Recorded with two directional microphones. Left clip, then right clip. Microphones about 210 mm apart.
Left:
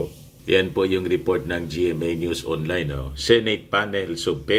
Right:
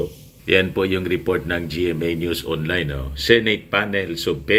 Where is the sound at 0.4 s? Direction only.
5° left (ahead or behind).